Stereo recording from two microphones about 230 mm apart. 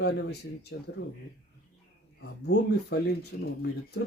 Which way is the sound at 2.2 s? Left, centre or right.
Left.